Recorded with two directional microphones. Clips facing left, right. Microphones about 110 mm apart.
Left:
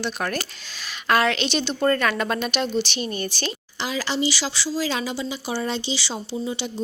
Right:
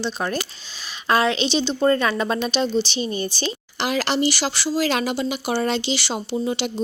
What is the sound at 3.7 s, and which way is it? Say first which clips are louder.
Speech: right 4 dB; 65° right (ahead or behind).